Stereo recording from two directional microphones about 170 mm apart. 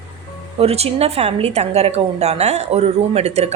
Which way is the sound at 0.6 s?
35° right (ahead or behind).